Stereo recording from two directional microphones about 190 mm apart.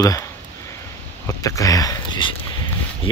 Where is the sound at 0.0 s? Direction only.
20° left (ahead or behind).